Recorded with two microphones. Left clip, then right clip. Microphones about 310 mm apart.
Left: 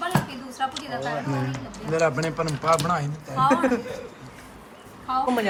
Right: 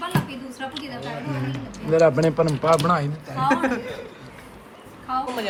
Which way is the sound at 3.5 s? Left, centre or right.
Left.